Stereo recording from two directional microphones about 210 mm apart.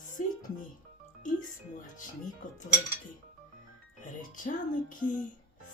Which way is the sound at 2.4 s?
40° left (ahead or behind).